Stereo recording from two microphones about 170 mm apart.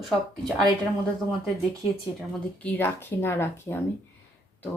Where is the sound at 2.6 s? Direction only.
10° left (ahead or behind).